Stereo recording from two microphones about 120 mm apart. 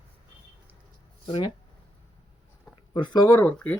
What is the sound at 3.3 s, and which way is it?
Speech, 15° left (ahead or behind).